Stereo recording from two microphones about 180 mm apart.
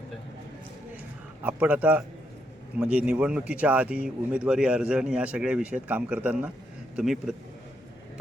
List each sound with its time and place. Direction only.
1.5 s a man's voice: 10° right (ahead or behind)